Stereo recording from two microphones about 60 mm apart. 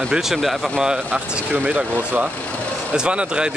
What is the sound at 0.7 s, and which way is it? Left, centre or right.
Speech, centre.